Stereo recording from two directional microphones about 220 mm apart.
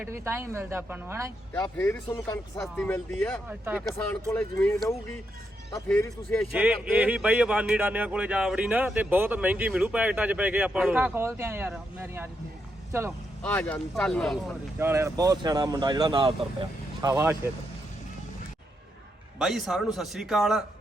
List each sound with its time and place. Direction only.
0.0 s speech: 10° right (ahead or behind)
1.7 s speech: 5° left (ahead or behind)
3.5 s speech: 5° right (ahead or behind)
4.3 s speech: 10° left (ahead or behind)
6.5 s speech: 5° right (ahead or behind)
13.4 s speech: 5° left (ahead or behind)
14.8 s speech: 10° right (ahead or behind)
19.4 s speech: centre (ahead or behind)